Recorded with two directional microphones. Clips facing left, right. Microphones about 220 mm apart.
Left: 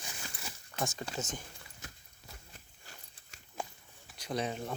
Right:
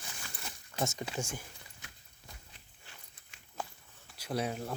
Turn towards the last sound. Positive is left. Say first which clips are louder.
# even
turn(degrees=-5)  # may be behind; listen again after turning